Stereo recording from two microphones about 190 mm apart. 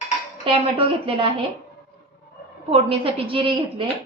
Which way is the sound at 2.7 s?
30° right (ahead or behind).